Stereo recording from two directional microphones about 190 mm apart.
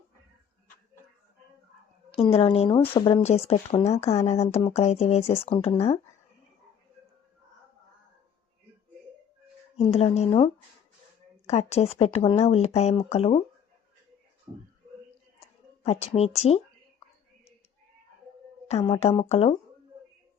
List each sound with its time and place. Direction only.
2.1 s a woman's voice: 30° left (ahead or behind)
9.7 s speech: 35° left (ahead or behind)
15.4 s a woman's voice: 35° left (ahead or behind)
18.9 s speech: 35° left (ahead or behind)